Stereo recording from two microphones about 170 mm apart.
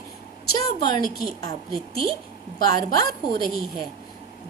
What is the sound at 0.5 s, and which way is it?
A woman's voice, 25° left (ahead or behind).